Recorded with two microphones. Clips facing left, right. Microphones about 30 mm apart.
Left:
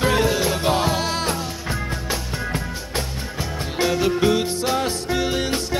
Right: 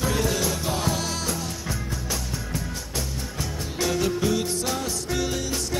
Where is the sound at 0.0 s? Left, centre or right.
Left.